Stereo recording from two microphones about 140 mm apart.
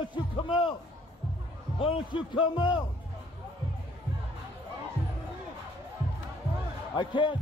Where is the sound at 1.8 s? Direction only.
40° left (ahead or behind).